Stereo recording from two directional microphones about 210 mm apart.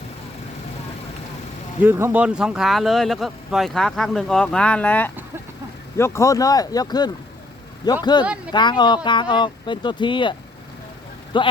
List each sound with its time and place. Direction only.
1.8 s speech: 10° right (ahead or behind); by 10.3 s 25° left (ahead or behind)
11.3 s speech: 20° left (ahead or behind)